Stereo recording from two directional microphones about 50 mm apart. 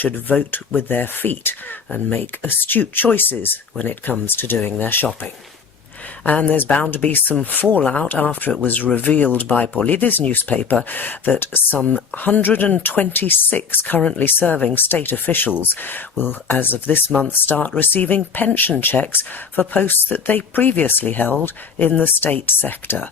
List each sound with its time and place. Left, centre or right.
0.0 s speech: left
6.2 s speech: left